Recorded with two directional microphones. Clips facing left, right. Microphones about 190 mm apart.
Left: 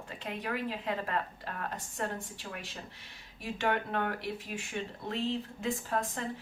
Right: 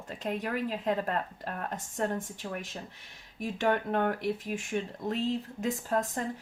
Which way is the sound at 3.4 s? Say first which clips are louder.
Right 3 dB; 45° right (ahead or behind).